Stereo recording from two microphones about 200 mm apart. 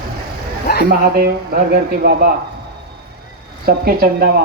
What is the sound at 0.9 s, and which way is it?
Speech, 50° right (ahead or behind).